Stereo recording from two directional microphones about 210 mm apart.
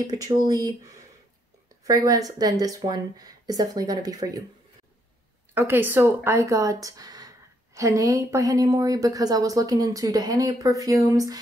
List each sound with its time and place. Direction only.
0.0 s speech: 15° right (ahead or behind)
5.5 s speech: 10° right (ahead or behind)